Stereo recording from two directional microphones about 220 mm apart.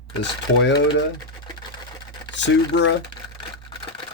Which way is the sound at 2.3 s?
55° left (ahead or behind).